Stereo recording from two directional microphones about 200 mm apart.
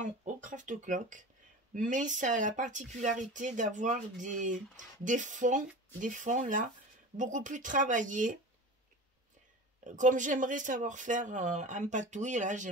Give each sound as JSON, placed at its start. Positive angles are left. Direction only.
{"t": 0.0, "sound": "speech", "side_deg": -40}
{"t": 9.8, "sound": "speech", "side_deg": -40}